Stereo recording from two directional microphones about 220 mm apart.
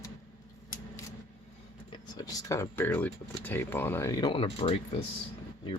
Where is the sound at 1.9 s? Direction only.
15° left (ahead or behind).